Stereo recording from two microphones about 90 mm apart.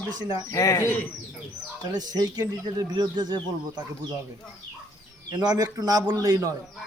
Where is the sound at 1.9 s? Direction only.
50° right (ahead or behind).